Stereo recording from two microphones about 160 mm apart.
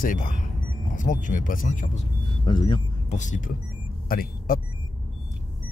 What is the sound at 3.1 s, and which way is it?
Speech, 50° left (ahead or behind).